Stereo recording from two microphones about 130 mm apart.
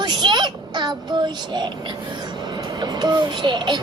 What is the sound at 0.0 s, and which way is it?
A woman's voice, 35° right (ahead or behind).